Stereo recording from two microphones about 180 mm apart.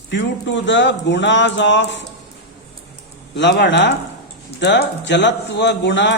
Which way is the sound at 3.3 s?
75° left (ahead or behind).